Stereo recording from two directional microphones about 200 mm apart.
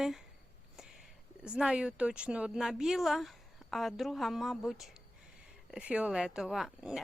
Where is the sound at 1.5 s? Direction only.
5° right (ahead or behind).